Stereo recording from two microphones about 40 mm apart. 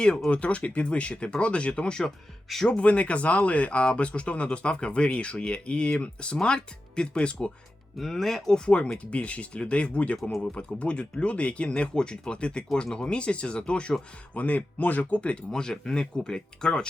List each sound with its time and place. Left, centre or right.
0.3 s speech: left
2.0 s speech: centre
2.6 s speech: left
7.9 s speech: centre
8.6 s speech: left
14.3 s speech: left